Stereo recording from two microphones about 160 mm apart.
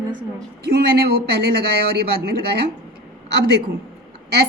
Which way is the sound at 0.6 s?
80° right.